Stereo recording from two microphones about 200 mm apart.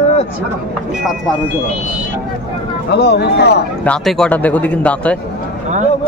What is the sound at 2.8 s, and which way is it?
Speech, 55° left (ahead or behind).